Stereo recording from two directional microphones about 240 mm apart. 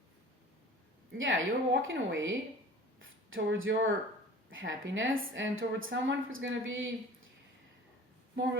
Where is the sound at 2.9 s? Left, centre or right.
Right.